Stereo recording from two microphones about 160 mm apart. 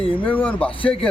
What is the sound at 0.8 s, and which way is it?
Speech, 35° left (ahead or behind).